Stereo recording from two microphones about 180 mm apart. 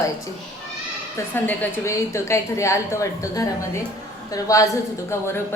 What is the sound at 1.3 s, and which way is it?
A woman's voice, 10° left (ahead or behind).